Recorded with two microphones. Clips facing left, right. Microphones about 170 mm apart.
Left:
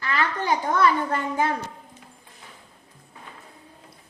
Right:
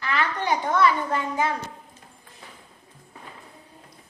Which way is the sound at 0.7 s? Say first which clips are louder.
Even; 50° left (ahead or behind).